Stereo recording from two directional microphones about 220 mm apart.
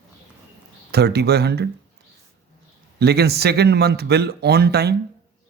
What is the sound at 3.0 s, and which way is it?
Speech, 45° right (ahead or behind).